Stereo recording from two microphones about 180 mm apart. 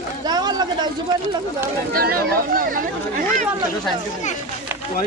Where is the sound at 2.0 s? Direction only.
55° right (ahead or behind).